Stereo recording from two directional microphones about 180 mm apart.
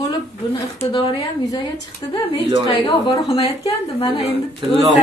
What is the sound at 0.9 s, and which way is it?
Speech, 25° left (ahead or behind).